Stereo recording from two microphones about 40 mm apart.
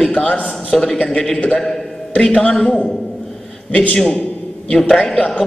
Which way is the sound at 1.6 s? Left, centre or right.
Centre.